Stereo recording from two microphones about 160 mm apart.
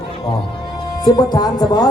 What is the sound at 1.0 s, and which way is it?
Music, 25° left (ahead or behind).